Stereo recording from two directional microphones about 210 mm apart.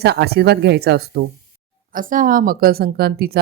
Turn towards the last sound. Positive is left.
turn(degrees=-45)  # may be behind; listen again after turning